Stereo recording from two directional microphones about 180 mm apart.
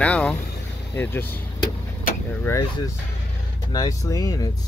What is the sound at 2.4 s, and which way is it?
Speech, 15° left (ahead or behind).